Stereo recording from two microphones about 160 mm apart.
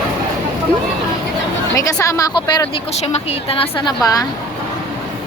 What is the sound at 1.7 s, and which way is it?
Speech, 20° left (ahead or behind).